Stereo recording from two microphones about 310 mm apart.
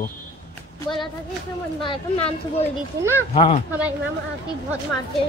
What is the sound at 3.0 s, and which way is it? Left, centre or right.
Speech, centre.